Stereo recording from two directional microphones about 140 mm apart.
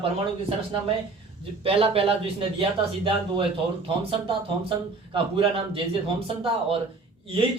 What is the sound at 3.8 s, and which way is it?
A man's voice, 40° right (ahead or behind).